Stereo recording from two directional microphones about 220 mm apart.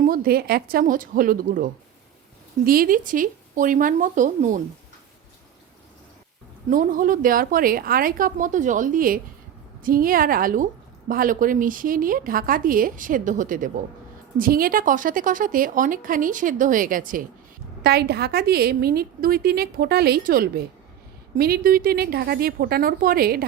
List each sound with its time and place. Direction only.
0.0 s a woman's voice: 40° right (ahead or behind)
6.7 s a woman's voice: 40° right (ahead or behind)